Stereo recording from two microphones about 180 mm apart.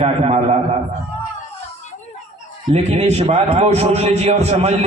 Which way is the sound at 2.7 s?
35° right (ahead or behind).